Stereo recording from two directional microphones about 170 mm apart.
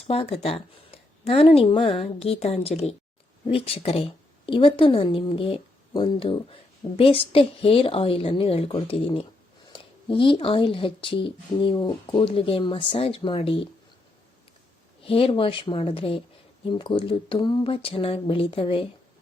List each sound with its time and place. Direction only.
0.1 s a woman's voice: 35° left (ahead or behind)
15.0 s a woman's voice: 35° left (ahead or behind)